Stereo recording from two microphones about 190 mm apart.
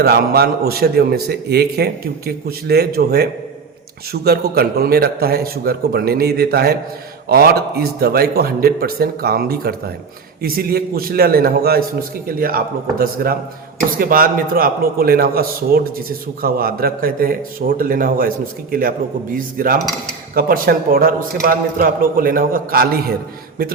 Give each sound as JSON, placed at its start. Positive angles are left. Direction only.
{"t": 0.0, "sound": "a man's voice", "side_deg": -55}